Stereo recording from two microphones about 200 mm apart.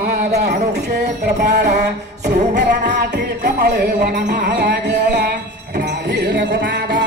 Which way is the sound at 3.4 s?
50° right (ahead or behind).